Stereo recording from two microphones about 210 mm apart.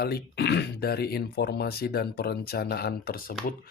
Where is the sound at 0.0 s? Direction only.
50° left (ahead or behind).